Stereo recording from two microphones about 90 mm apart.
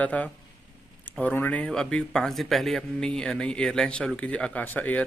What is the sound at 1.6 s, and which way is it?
Speech, 10° left (ahead or behind).